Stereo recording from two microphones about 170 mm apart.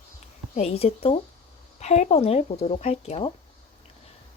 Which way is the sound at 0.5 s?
40° left (ahead or behind).